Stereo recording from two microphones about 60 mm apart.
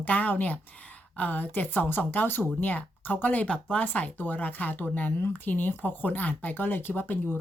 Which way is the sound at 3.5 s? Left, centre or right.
Centre.